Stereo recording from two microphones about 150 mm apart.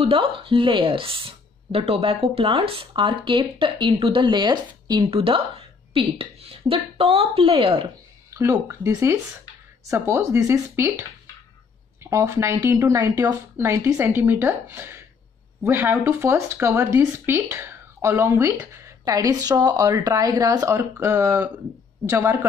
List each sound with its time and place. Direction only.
0.0 s speech: 35° right (ahead or behind)
8.3 s speech: 20° right (ahead or behind)